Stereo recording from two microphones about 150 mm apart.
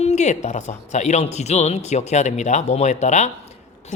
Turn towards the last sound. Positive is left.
turn(degrees=50)  # may be behind; listen again after turning